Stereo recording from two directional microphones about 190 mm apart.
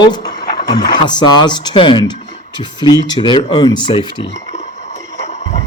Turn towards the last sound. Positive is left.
turn(degrees=25)  # may be behind; listen again after turning